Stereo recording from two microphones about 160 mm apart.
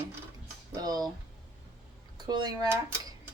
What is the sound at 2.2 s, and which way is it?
Speech, 25° right (ahead or behind).